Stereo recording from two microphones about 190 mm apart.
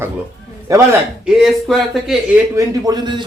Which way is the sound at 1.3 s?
Centre (ahead or behind).